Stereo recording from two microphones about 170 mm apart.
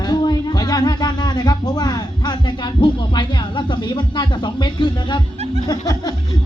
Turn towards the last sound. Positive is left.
turn(degrees=20)  # may be behind; listen again after turning